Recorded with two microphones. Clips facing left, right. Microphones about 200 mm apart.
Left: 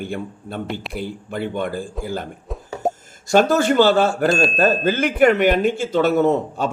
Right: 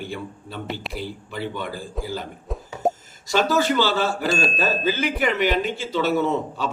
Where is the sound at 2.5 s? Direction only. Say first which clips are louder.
Right 2 dB; centre (ahead or behind).